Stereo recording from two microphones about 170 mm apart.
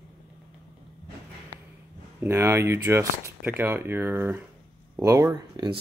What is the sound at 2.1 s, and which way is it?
Speech, 15° right (ahead or behind).